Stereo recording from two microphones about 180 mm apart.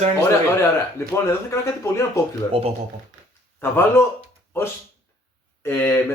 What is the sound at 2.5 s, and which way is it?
Speech, 35° right (ahead or behind).